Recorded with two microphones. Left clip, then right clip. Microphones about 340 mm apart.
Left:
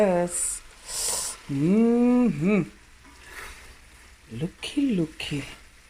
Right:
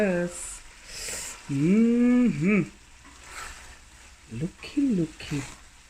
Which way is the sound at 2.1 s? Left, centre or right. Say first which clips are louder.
Left 1 dB; left.